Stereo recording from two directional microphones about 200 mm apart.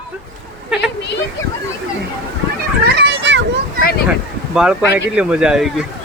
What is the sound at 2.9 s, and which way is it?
Children playing, 65° right (ahead or behind).